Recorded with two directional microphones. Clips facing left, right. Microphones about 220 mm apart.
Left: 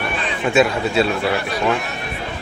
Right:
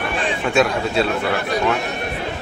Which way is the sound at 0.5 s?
Centre (ahead or behind).